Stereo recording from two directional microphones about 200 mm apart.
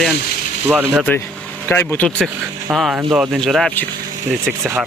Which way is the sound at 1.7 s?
10° left (ahead or behind).